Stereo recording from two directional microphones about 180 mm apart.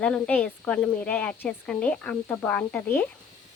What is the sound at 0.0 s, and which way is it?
Speech, 5° left (ahead or behind).